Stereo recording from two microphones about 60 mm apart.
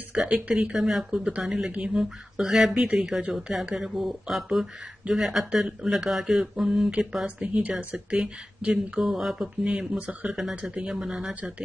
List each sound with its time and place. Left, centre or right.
0.1 s speech: centre
7.2 s speech: centre